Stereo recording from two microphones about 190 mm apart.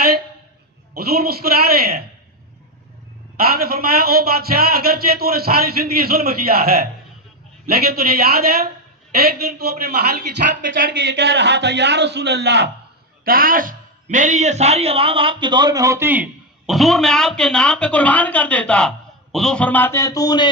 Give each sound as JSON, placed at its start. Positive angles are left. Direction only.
{"t": 0.9, "sound": "a man's voice", "side_deg": -55}
{"t": 3.3, "sound": "a man's voice", "side_deg": -55}
{"t": 13.2, "sound": "a man's voice", "side_deg": -50}